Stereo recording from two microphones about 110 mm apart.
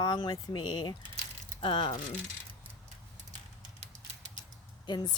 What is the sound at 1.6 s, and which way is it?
Speech, 55° left (ahead or behind).